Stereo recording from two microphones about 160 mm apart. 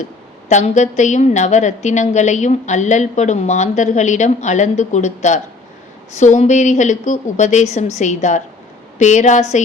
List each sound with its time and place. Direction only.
0.0 s a woman's voice: 45° left (ahead or behind)